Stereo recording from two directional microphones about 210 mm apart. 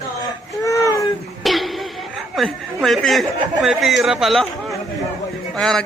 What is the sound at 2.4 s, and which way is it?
Speech, centre (ahead or behind).